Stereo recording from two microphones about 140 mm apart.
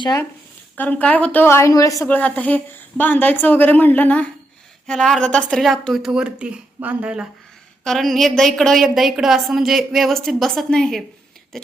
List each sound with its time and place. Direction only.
0.0 s speech: 25° left (ahead or behind)
0.8 s a woman's voice: 10° left (ahead or behind)
2.0 s a woman's voice: 10° left (ahead or behind)
11.5 s a sound: 5° left (ahead or behind)